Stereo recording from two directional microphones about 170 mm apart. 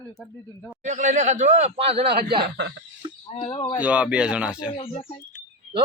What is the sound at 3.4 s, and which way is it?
Speech, 30° left (ahead or behind).